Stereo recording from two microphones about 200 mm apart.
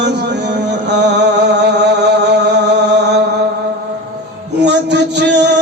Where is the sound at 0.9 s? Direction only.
60° right (ahead or behind).